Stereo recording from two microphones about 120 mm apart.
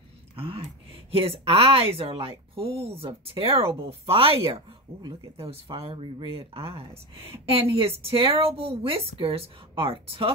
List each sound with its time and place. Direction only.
0.4 s speech: 50° right (ahead or behind)